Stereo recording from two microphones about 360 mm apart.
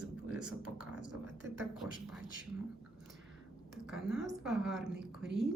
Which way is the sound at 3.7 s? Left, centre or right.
Centre.